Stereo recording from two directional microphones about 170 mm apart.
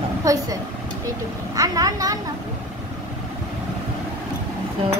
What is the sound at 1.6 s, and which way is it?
Speech, 20° right (ahead or behind).